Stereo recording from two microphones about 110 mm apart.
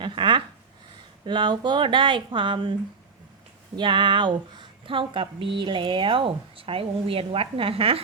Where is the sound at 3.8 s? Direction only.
45° right (ahead or behind).